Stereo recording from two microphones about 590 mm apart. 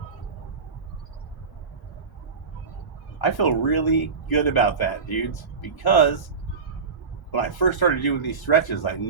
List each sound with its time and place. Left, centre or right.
3.2 s speech: left
7.3 s speech: left